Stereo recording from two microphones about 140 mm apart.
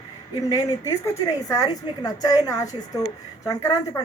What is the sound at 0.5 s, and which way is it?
A woman's voice, 25° left (ahead or behind).